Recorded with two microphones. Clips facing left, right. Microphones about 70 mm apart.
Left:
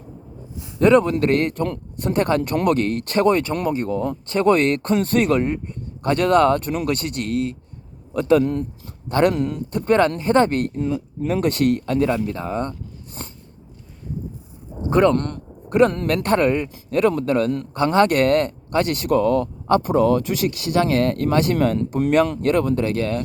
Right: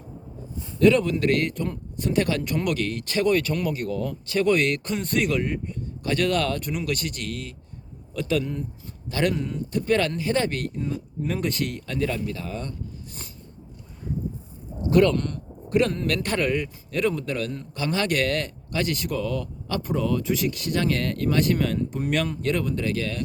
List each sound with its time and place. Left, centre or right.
0.8 s speech: left
3.3 s speech: left
9.3 s speech: left
9.7 s speech: left
11.3 s speech: left
14.8 s a man's voice: left
15.1 s a man's voice: left
21.8 s speech: left
22.4 s speech: left